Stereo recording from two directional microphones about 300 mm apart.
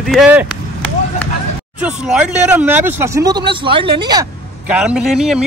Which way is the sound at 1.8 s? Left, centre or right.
Centre.